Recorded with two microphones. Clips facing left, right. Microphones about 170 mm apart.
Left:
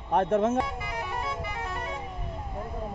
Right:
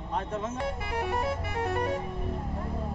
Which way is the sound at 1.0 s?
60° right (ahead or behind).